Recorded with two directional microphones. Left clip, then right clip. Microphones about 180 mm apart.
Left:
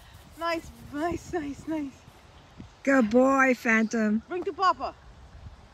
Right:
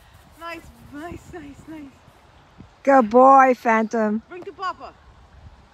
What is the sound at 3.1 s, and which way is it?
Speech, 10° right (ahead or behind).